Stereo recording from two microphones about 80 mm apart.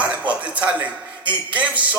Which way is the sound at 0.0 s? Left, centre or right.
Centre.